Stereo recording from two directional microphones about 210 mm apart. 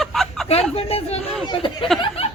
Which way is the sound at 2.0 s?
30° left (ahead or behind).